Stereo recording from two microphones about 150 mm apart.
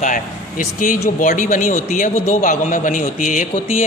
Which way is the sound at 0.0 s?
60° left (ahead or behind).